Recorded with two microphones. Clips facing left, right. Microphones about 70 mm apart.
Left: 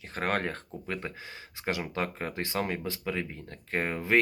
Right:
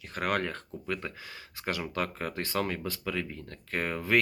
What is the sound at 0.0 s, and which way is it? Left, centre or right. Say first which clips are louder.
Speech: even; left.